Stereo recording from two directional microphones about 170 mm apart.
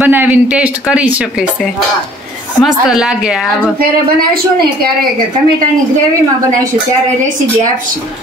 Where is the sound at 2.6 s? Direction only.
5° right (ahead or behind).